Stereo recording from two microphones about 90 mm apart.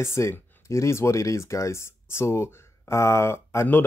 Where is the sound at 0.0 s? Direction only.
30° left (ahead or behind).